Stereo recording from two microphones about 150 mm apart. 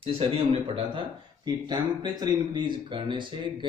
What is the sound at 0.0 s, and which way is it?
Speech, 35° right (ahead or behind).